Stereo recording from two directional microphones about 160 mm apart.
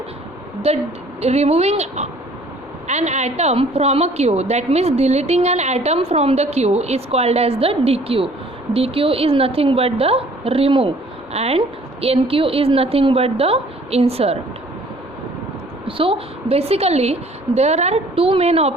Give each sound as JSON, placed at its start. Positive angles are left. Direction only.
{"t": 1.2, "sound": "a woman's voice", "side_deg": -40}
{"t": 15.9, "sound": "a woman's voice", "side_deg": -35}